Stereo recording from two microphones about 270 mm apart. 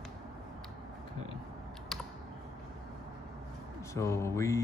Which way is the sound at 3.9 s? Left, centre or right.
Centre.